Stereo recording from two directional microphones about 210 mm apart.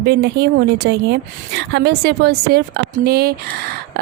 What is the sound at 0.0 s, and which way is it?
A woman's voice, 50° right (ahead or behind).